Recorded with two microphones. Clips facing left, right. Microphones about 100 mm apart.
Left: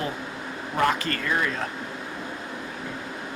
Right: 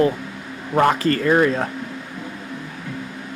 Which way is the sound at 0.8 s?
40° right (ahead or behind).